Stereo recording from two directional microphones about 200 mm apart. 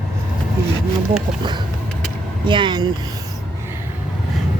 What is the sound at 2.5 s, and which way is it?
Speech, 25° right (ahead or behind).